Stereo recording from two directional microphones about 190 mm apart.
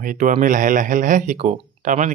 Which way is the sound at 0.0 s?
45° right (ahead or behind).